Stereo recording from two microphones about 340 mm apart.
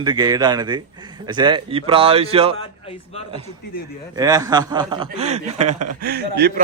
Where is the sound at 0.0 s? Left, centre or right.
Centre.